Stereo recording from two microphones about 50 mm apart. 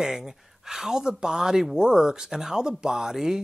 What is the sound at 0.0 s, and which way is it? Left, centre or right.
Speech, centre.